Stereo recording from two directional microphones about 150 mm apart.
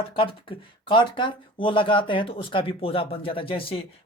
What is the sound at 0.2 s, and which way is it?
Speech, 35° left (ahead or behind).